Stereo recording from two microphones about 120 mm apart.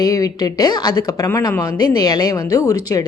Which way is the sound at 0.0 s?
30° left (ahead or behind).